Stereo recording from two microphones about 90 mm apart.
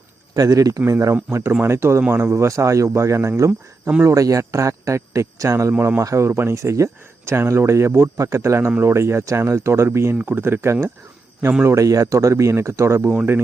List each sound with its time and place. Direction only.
0.3 s speech: 40° right (ahead or behind)
0.9 s speech: 30° right (ahead or behind)